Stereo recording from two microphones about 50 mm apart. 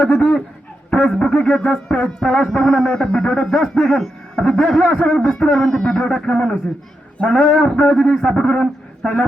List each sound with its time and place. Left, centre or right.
0.1 s speech: left
0.9 s a man's voice: centre
3.2 s a sound: centre
3.8 s a man's voice: centre
7.2 s a sound: left
7.4 s a man's voice: centre